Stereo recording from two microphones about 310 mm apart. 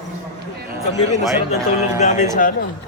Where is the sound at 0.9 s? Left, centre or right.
Centre.